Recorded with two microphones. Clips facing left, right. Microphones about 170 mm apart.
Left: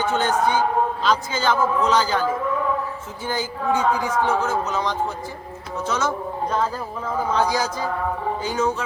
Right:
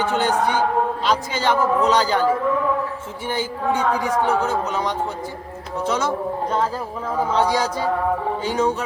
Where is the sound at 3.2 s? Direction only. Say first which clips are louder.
Right 1 dB; 25° right (ahead or behind).